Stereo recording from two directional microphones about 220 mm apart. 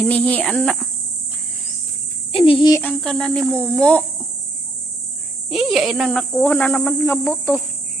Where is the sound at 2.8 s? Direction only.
5° left (ahead or behind).